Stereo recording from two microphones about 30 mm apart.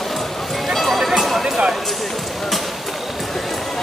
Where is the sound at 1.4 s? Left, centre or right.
Right.